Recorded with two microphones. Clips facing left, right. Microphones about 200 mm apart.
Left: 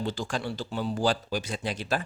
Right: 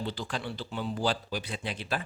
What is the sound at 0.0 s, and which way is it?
A man's voice, 45° left (ahead or behind).